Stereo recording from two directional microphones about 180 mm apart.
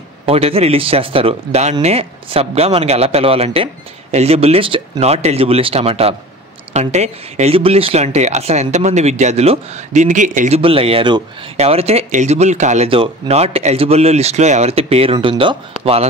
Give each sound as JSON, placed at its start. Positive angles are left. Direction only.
{"t": 0.3, "sound": "speech", "side_deg": -35}
{"t": 10.6, "sound": "speech", "side_deg": -30}